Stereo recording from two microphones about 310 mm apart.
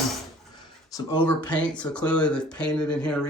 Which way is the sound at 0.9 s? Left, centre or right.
Centre.